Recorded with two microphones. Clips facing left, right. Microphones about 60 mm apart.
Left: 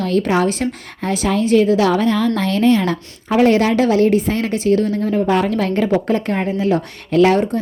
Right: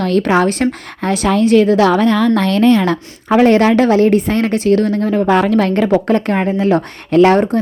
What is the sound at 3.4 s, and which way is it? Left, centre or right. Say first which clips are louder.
A woman's voice: right 3 dB; right.